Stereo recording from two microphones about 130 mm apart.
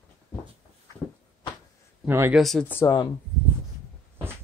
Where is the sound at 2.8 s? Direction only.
20° left (ahead or behind).